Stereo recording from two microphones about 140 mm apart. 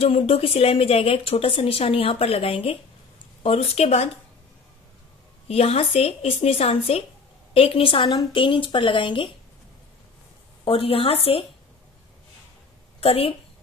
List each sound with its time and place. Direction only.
0.0 s a woman's voice: 40° left (ahead or behind)
5.5 s a woman's voice: 45° left (ahead or behind)
10.6 s a woman's voice: 40° left (ahead or behind)
13.0 s a woman's voice: 45° left (ahead or behind)